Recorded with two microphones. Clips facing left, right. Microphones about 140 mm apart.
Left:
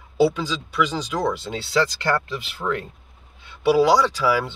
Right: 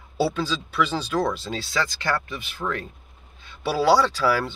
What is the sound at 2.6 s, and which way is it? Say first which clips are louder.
Speech: left 2 dB; 15° left (ahead or behind).